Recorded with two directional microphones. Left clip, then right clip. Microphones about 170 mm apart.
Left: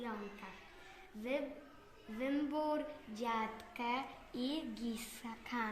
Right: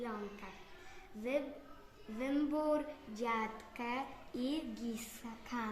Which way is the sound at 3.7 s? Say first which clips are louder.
Left 3 dB; centre (ahead or behind).